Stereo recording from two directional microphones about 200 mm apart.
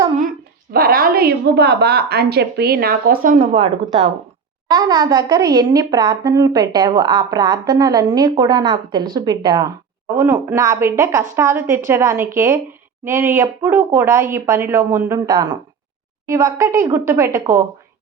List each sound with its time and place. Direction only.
0.7 s a woman's voice: 50° right (ahead or behind)
3.5 s a woman's voice: 25° right (ahead or behind)